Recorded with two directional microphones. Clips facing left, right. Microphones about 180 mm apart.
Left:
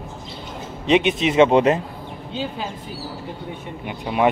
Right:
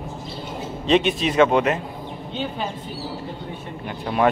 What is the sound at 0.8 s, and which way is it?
Speech, 15° left (ahead or behind).